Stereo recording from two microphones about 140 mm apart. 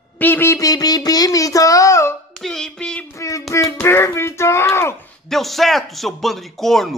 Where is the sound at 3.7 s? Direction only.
15° left (ahead or behind).